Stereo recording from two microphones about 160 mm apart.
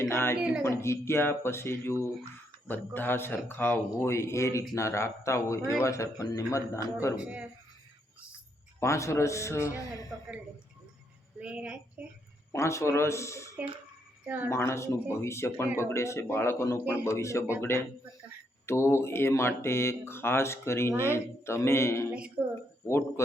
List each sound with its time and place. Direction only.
0.0 s a woman's voice: 15° left (ahead or behind)
0.3 s a woman's voice: 5° right (ahead or behind)
0.6 s a man's voice: 15° left (ahead or behind)
7.2 s speech: 10° right (ahead or behind)
8.8 s speech: 20° left (ahead or behind)
11.3 s speech: 5° right (ahead or behind)
12.5 s speech: 20° left (ahead or behind)
14.3 s speech: 10° right (ahead or behind)
14.5 s speech: 15° left (ahead or behind)
22.4 s speech: 10° right (ahead or behind)
22.9 s speech: 15° left (ahead or behind)